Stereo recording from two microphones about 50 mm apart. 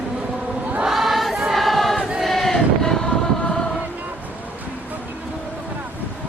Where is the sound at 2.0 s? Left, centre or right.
Centre.